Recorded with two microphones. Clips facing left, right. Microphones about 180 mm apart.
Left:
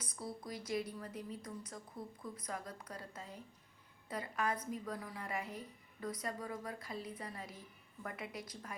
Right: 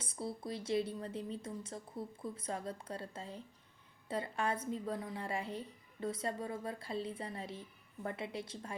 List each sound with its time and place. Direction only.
0.0 s a woman's voice: 25° right (ahead or behind)